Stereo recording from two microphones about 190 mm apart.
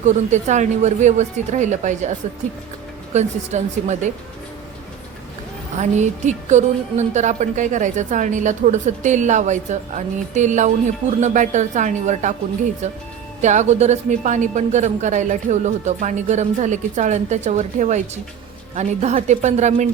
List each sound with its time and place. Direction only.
0.0 s a woman's voice: 40° right (ahead or behind)
5.8 s a woman's voice: 40° right (ahead or behind)
13.4 s a woman's voice: 40° right (ahead or behind)